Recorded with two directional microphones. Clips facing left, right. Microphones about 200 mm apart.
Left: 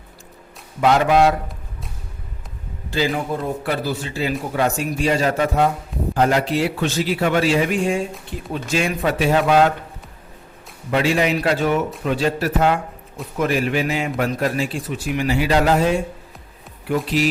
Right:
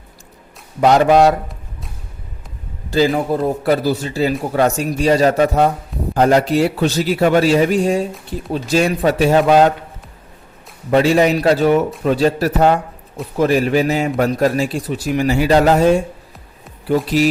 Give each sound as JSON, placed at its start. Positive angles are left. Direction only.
{"t": 0.8, "sound": "a man's voice", "side_deg": -40}
{"t": 2.9, "sound": "a man's voice", "side_deg": -40}
{"t": 10.9, "sound": "a man's voice", "side_deg": -40}